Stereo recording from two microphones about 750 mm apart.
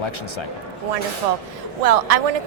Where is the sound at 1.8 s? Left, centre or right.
Right.